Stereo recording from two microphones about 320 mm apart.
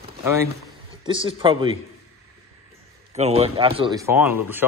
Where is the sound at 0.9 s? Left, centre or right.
Centre.